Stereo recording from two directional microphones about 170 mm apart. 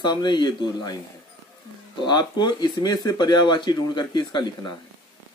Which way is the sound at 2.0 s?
25° left (ahead or behind).